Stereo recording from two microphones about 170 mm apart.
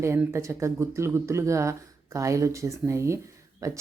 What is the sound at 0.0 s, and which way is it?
Speech, 15° right (ahead or behind).